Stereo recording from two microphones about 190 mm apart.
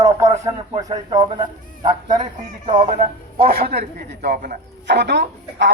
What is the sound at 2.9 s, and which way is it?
Speech, 45° right (ahead or behind).